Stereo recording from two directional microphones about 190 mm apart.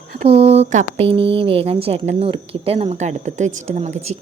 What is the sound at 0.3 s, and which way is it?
Speech, 35° right (ahead or behind).